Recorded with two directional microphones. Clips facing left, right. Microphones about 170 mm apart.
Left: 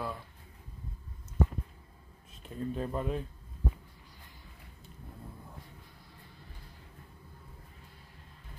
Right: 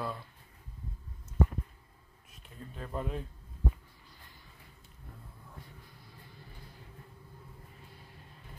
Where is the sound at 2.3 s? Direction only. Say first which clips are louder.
Left 12 dB; 25° left (ahead or behind).